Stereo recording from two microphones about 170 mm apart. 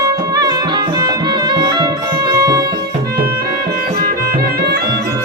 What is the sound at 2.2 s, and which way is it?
Music, 20° right (ahead or behind).